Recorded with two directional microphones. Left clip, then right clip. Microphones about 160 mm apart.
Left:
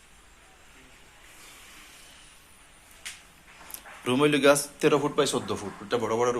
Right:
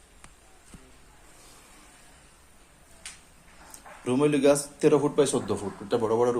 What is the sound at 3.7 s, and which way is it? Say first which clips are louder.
A man's voice: left 1 dB; 5° right (ahead or behind).